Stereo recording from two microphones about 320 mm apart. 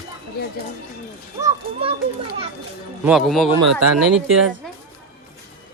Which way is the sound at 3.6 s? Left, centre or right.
Right.